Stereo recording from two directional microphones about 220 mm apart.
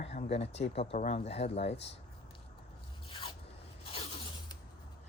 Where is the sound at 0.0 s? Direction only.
30° left (ahead or behind).